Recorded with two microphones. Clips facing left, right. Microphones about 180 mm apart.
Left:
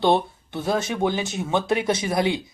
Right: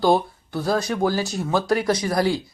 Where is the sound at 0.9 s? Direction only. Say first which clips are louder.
Right 1 dB; centre (ahead or behind).